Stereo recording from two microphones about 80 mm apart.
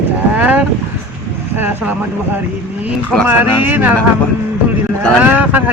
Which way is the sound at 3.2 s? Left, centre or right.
Right.